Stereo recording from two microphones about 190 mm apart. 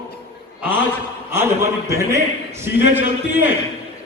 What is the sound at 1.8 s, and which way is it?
Speech, 15° right (ahead or behind).